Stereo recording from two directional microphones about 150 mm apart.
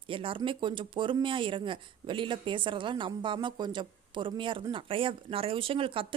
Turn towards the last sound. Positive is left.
turn(degrees=-35)  # may be behind; listen again after turning